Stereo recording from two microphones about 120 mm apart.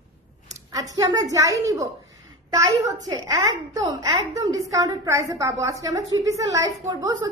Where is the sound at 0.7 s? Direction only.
30° right (ahead or behind).